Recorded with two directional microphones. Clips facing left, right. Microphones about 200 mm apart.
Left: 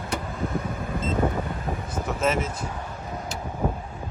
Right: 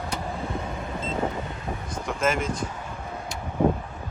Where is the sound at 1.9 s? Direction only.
5° left (ahead or behind).